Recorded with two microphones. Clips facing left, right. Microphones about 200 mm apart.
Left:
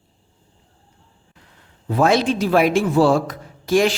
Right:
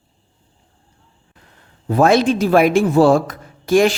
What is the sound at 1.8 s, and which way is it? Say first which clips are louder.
Speech: right 3 dB; 50° right (ahead or behind).